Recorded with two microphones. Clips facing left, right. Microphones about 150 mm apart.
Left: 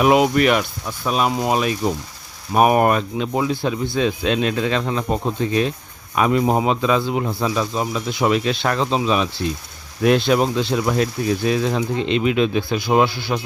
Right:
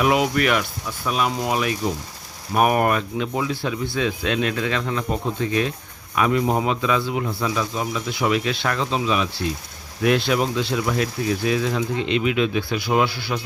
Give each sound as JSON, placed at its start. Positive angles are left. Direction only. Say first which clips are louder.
{"t": 0.0, "sound": "speech", "louder": "left 4 dB", "side_deg": 25}